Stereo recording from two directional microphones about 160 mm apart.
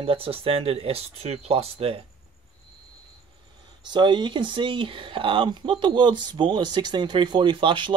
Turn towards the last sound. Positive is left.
turn(degrees=-30)  # may be behind; listen again after turning